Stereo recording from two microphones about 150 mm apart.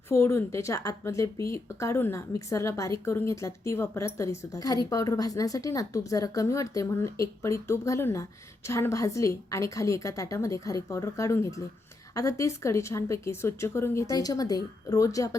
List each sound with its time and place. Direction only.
0.1 s speech: 15° left (ahead or behind)